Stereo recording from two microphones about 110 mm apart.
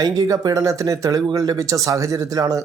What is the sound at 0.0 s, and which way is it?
Speech, 35° right (ahead or behind).